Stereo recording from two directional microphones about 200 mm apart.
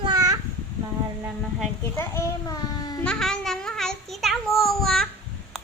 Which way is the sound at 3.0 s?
5° left (ahead or behind).